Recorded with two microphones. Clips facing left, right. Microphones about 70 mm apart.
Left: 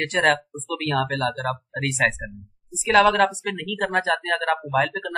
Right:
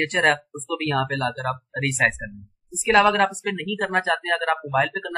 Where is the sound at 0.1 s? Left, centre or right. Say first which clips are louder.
Even; centre.